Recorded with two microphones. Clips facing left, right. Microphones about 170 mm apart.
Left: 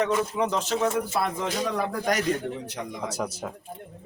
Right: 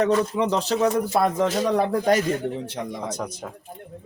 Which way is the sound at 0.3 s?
35° right (ahead or behind).